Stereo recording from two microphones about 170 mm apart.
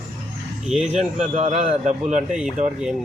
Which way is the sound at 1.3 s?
40° right (ahead or behind).